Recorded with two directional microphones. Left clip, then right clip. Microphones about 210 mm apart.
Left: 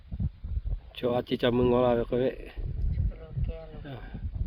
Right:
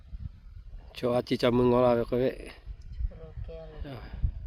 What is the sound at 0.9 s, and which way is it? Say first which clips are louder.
Speech: right 1 dB; 15° right (ahead or behind).